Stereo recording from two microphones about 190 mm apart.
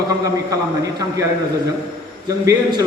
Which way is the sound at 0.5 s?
20° right (ahead or behind).